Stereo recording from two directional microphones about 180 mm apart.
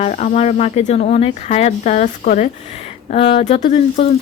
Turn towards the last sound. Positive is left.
turn(degrees=35)  # may be behind; listen again after turning